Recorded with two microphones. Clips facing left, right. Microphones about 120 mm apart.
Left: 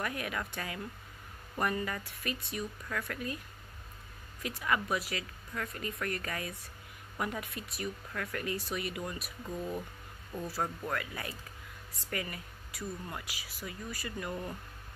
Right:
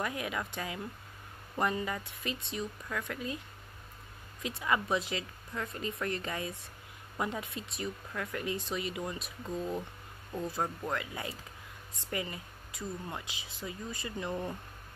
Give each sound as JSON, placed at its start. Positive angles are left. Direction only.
{"t": 0.0, "sound": "speech", "side_deg": -20}
{"t": 4.4, "sound": "speech", "side_deg": -20}